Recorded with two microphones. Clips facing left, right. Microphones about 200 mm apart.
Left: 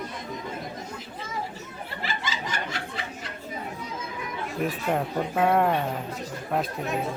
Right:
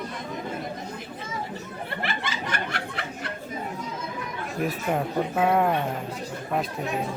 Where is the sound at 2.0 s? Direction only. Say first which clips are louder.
Left 1 dB; 60° right (ahead or behind).